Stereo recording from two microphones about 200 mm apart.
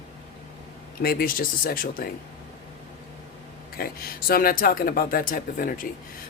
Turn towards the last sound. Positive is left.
turn(degrees=45)  # may be behind; listen again after turning